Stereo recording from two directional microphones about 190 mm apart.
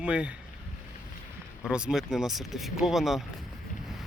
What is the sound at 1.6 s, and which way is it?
Speech, 5° right (ahead or behind).